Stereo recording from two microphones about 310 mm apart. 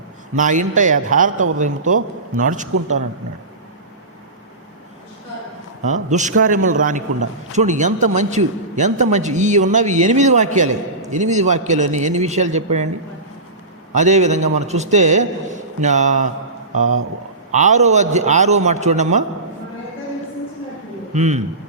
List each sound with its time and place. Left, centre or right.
0.3 s a man's voice: right
5.8 s a man's voice: right
13.9 s a man's voice: right
17.5 s a man's voice: right
21.1 s a man's voice: right